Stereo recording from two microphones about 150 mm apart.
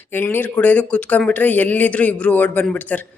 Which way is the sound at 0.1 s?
10° left (ahead or behind).